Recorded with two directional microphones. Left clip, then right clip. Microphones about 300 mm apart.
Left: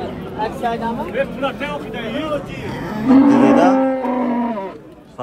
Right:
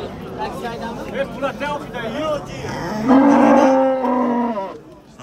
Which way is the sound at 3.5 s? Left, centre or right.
Centre.